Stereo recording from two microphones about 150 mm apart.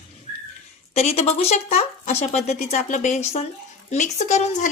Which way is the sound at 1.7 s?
45° left (ahead or behind).